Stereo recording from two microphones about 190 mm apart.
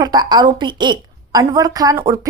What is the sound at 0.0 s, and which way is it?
Speech, 20° right (ahead or behind).